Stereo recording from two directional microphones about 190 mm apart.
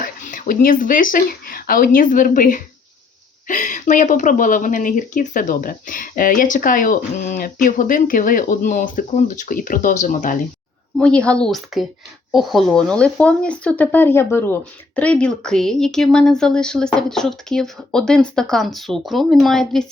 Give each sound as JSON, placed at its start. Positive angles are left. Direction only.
{"t": 0.0, "sound": "speech", "side_deg": 45}
{"t": 10.9, "sound": "speech", "side_deg": 5}